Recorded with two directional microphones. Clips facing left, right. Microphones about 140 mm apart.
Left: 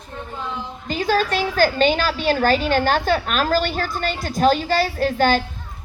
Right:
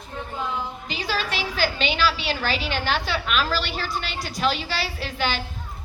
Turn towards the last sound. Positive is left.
turn(degrees=45)  # may be behind; listen again after turning